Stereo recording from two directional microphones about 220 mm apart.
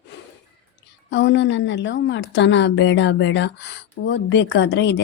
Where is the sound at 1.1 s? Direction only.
55° left (ahead or behind).